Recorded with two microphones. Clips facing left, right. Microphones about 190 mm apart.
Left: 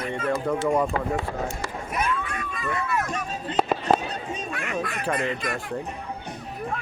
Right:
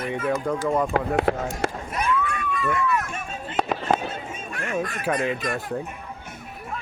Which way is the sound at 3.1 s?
35° left (ahead or behind).